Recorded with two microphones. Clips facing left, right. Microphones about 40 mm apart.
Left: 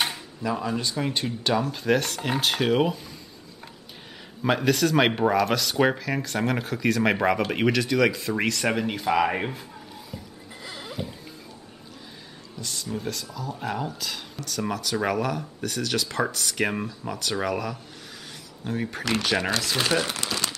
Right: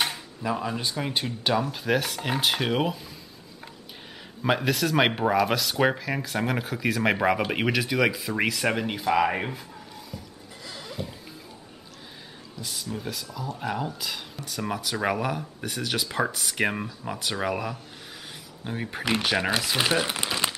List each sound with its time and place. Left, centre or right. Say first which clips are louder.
0.4 s speech: left 1 dB; centre
4.4 s speech: left 2 dB; centre
10.1 s music: left 1 dB; centre
10.9 s a sound: left 1 dB; centre
12.5 s a sound: left 1 dB; centre
12.9 s speech: left 4 dB; centre; by 20.5 s right